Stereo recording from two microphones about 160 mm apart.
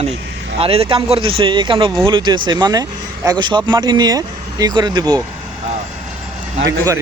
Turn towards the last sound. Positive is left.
turn(degrees=-20)  # may be behind; listen again after turning